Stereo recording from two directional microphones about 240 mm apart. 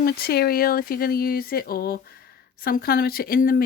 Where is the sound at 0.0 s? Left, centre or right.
Left.